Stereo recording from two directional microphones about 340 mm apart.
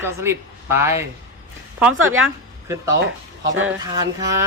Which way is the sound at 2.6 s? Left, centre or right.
Centre.